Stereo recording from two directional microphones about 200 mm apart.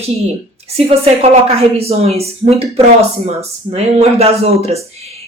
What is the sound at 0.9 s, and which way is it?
A woman's voice, 30° right (ahead or behind).